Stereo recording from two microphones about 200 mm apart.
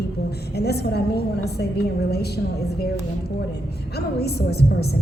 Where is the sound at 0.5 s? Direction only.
55° left (ahead or behind).